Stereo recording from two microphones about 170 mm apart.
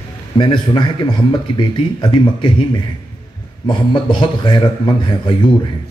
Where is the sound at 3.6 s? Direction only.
30° left (ahead or behind).